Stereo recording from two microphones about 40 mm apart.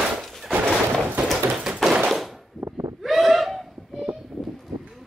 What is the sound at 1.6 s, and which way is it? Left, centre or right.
Tap, centre.